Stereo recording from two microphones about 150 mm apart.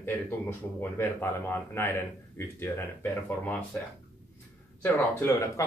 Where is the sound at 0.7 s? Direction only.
15° left (ahead or behind).